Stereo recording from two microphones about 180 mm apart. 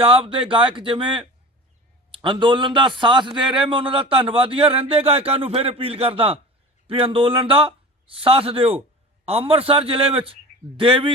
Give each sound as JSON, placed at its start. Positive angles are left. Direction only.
{"t": 0.0, "sound": "a man's voice", "side_deg": -30}